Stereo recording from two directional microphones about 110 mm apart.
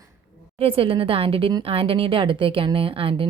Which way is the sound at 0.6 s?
60° right (ahead or behind).